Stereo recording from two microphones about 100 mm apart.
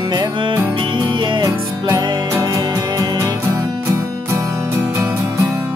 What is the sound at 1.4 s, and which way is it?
Music, 40° right (ahead or behind).